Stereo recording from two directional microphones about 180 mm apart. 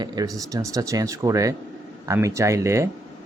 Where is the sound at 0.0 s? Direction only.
20° right (ahead or behind).